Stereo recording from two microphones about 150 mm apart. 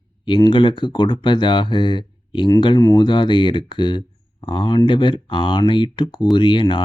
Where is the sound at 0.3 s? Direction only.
30° left (ahead or behind).